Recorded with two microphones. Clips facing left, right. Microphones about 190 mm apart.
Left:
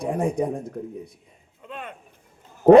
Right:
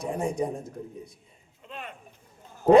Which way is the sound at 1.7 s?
55° left (ahead or behind).